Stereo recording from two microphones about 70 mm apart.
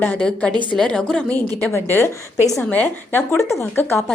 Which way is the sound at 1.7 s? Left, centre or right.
Left.